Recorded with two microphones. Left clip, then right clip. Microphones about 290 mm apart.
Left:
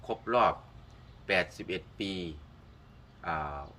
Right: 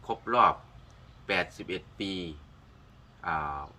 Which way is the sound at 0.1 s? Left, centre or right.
Centre.